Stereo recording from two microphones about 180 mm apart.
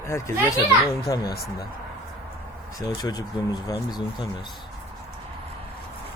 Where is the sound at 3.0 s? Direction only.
20° left (ahead or behind).